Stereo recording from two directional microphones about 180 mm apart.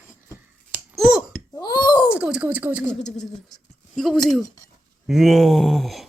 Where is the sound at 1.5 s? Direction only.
25° left (ahead or behind).